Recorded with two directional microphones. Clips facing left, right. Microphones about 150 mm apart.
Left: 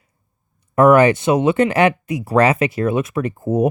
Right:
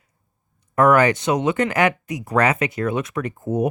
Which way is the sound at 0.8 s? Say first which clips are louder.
Left 4 dB; 25° left (ahead or behind).